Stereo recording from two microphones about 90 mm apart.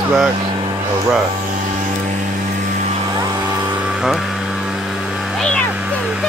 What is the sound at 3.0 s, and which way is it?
Vehicle, 45° right (ahead or behind).